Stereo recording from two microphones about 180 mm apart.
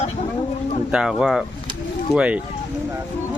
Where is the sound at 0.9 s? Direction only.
5° right (ahead or behind).